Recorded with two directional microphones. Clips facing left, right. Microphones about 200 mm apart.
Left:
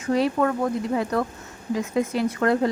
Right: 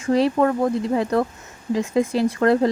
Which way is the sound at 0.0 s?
30° right (ahead or behind).